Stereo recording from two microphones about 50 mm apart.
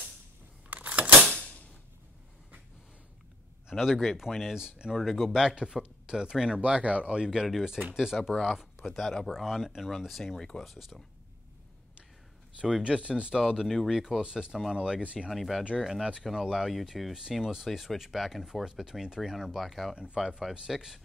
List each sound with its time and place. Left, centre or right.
0.7 s camera: right
1.3 s a sound: centre
3.7 s speech: centre
4.9 s speech: centre
6.6 s speech: right
7.9 s speech: centre
8.2 s speech: centre
9.3 s speech: centre
12.8 s speech: centre
14.7 s speech: centre
15.3 s speech: centre
15.6 s speech: centre